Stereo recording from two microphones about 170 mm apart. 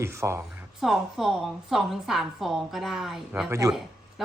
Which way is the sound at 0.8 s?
Centre (ahead or behind).